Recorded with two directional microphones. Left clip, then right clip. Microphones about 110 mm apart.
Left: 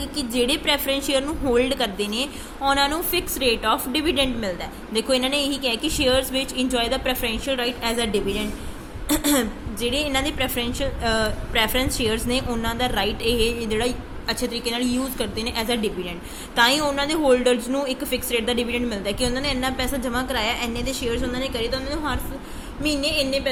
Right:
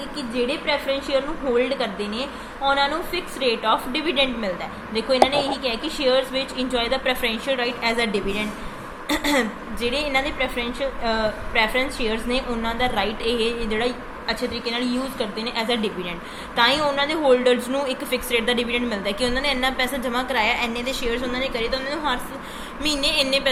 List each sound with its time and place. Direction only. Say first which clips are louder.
0.2 s a woman's voice: left 2 dB; 90° left; by 4.5 s 55° left (ahead or behind)
4.9 s a woman's voice: right 3 dB; 65° left (ahead or behind); by 22.2 s 35° left (ahead or behind)
22.8 s a sound: right 1 dB; 20° left (ahead or behind)